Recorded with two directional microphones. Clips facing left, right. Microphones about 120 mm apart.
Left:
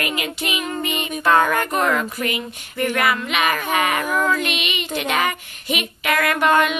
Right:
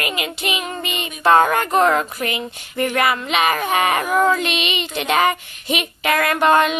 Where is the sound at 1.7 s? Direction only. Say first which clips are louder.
Right 4 dB; 35° right (ahead or behind).